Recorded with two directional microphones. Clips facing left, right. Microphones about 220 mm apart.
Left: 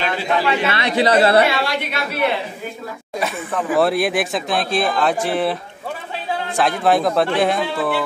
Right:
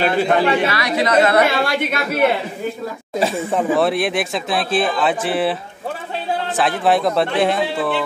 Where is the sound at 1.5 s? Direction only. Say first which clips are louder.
Right 3 dB; 50° right (ahead or behind).